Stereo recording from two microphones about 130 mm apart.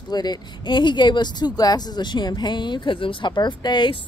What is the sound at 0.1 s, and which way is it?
Speech, 30° left (ahead or behind).